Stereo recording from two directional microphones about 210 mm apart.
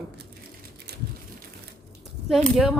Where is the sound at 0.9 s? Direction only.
50° right (ahead or behind).